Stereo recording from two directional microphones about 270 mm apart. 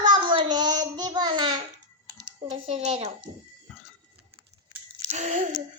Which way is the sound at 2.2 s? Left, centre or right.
Centre.